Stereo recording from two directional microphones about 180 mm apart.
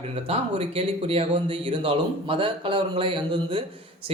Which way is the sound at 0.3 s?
30° right (ahead or behind).